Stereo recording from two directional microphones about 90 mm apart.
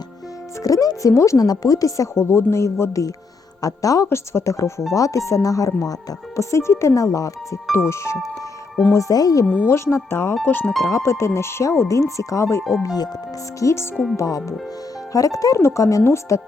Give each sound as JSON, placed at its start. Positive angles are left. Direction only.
{"t": 0.6, "sound": "speech", "side_deg": 40}
{"t": 9.6, "sound": "speech", "side_deg": 30}
{"t": 12.8, "sound": "speech", "side_deg": 45}
{"t": 13.9, "sound": "speech", "side_deg": 0}
{"t": 14.2, "sound": "speech", "side_deg": 40}